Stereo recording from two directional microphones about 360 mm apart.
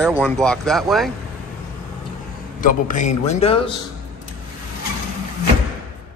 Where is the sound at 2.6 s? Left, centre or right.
Left.